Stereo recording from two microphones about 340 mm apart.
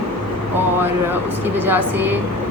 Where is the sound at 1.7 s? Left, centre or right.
Centre.